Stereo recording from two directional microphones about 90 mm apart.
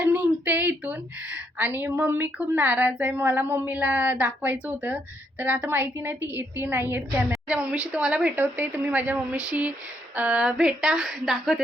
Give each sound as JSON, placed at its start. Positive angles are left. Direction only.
{"t": 0.0, "sound": "a sound", "side_deg": -20}
{"t": 1.5, "sound": "a woman's voice", "side_deg": -20}
{"t": 7.4, "sound": "a woman's voice", "side_deg": -10}